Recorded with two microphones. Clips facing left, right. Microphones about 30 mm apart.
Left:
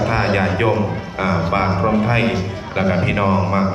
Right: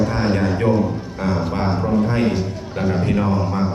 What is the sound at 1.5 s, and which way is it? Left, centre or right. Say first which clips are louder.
Speech: left 4 dB; left.